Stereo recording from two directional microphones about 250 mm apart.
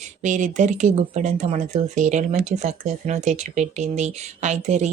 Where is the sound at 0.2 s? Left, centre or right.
Right.